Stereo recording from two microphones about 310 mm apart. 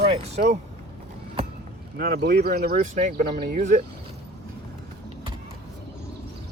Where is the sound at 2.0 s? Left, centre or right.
Right.